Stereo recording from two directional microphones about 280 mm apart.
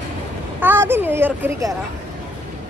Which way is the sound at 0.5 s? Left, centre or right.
Centre.